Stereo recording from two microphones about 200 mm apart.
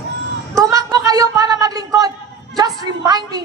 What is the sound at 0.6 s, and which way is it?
A woman's voice, 15° right (ahead or behind).